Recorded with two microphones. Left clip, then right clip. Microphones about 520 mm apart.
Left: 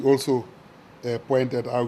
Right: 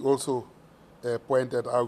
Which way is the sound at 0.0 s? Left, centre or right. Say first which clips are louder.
Left 5 dB; right.